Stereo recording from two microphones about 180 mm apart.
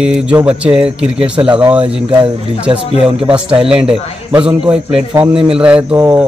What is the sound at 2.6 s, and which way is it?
Mantra, 5° right (ahead or behind).